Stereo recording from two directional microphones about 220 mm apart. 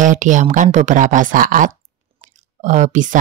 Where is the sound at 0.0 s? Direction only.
35° right (ahead or behind).